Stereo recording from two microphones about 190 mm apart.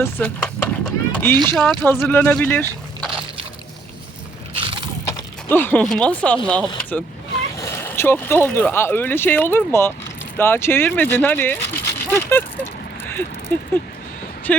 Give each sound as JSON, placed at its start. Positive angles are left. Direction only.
{"t": 0.0, "sound": "speech", "side_deg": 10}
{"t": 1.8, "sound": "speech", "side_deg": 10}
{"t": 4.5, "sound": "mechanisms", "side_deg": -30}
{"t": 5.5, "sound": "speech", "side_deg": 10}